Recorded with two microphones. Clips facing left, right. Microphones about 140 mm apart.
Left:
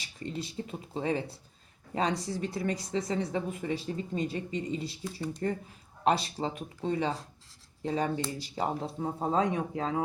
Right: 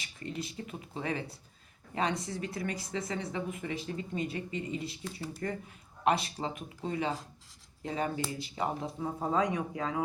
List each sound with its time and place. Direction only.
0.2 s speech: 30° left (ahead or behind)